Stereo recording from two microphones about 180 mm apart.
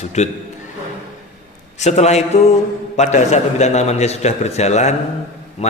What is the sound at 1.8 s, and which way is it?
A man's voice, 40° left (ahead or behind).